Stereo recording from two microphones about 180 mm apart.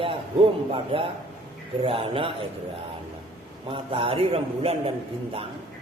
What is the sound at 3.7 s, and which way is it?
A man's voice, 30° right (ahead or behind).